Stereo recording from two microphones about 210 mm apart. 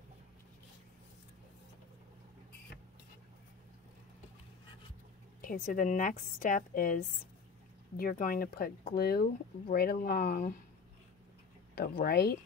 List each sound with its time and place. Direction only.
5.4 s a woman's voice: 40° left (ahead or behind)
8.0 s speech: 40° left (ahead or behind)
11.7 s speech: 45° left (ahead or behind)